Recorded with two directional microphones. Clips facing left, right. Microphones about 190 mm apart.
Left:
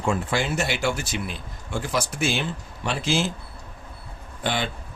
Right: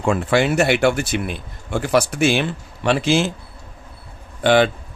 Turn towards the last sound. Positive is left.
turn(degrees=-70)  # may be behind; listen again after turning